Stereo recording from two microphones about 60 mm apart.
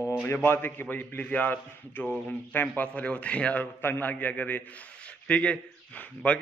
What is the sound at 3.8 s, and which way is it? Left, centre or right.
A man's voice, left.